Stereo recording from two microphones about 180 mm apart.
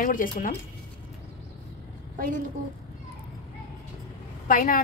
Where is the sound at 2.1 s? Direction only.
50° right (ahead or behind).